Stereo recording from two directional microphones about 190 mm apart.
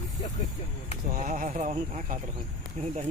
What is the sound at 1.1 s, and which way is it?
Speech, 40° right (ahead or behind).